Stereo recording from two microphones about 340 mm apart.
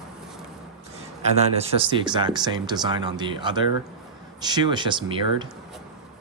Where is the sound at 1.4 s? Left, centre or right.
Centre.